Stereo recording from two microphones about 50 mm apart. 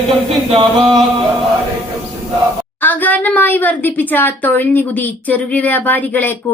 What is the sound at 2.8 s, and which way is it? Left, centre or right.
A woman's voice, left.